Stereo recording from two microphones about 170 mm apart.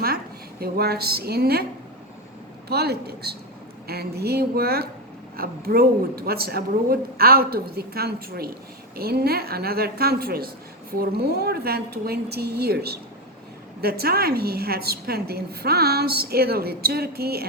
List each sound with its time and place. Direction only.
0.6 s a woman's voice: 70° right (ahead or behind)
2.6 s a woman's voice: 70° right (ahead or behind)